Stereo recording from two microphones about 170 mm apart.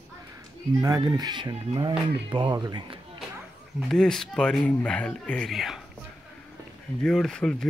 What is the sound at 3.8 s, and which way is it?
Speech, 5° left (ahead or behind).